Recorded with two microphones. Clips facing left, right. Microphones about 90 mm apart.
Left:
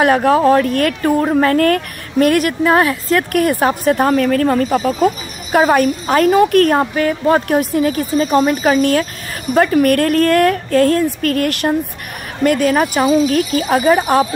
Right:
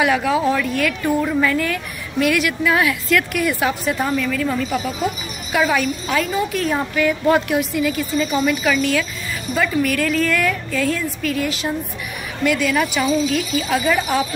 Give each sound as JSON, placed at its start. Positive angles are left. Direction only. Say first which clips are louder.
{"t": 0.0, "sound": "a woman's voice", "louder": "left 6 dB", "side_deg": 50}